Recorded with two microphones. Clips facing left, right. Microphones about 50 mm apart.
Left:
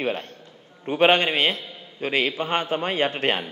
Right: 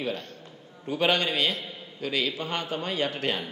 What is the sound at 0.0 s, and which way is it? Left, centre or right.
A man's voice, left.